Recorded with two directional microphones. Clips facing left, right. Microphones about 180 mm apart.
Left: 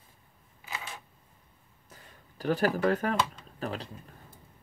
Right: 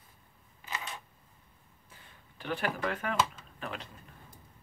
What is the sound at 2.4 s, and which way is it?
Speech, 40° left (ahead or behind).